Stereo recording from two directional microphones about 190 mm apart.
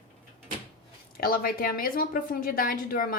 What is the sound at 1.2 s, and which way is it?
A woman's voice, 50° left (ahead or behind).